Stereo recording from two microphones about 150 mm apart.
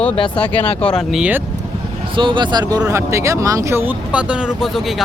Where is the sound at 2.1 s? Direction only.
35° right (ahead or behind); by 5.0 s centre (ahead or behind).